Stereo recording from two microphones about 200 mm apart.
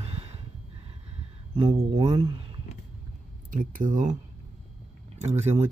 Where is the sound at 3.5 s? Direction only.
40° right (ahead or behind).